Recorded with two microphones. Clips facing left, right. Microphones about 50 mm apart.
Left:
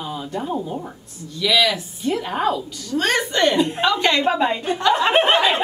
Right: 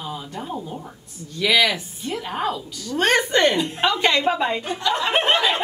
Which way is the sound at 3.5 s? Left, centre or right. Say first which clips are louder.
Left 3 dB; centre.